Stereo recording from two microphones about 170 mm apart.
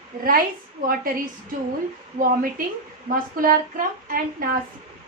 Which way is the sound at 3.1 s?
55° right (ahead or behind).